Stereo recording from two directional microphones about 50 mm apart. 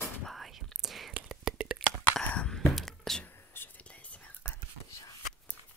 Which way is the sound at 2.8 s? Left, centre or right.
Centre.